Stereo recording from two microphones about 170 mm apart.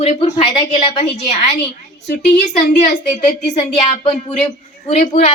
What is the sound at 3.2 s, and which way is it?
A woman's voice, 40° left (ahead or behind).